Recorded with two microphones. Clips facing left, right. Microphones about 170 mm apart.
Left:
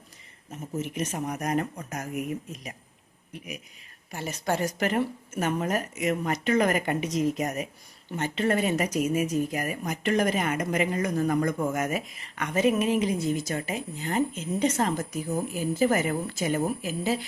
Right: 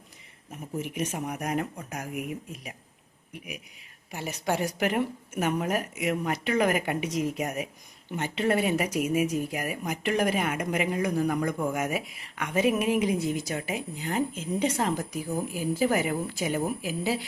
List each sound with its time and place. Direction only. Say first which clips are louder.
0.8 s speech: left 1 dB; 10° right (ahead or behind)